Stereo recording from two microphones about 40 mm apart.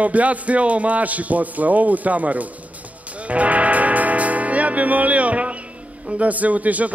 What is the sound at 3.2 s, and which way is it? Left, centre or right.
Music, right.